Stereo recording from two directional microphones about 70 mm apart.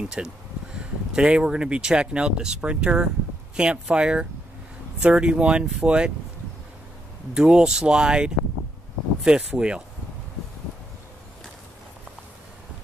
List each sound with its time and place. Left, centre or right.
0.2 s speech: centre
7.3 s speech: centre